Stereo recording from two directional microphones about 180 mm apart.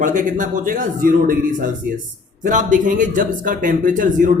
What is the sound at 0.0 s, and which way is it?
A man's voice, 45° right (ahead or behind).